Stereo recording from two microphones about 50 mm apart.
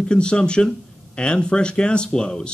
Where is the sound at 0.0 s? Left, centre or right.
Centre.